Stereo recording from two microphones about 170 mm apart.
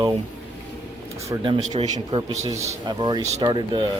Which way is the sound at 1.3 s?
25° right (ahead or behind).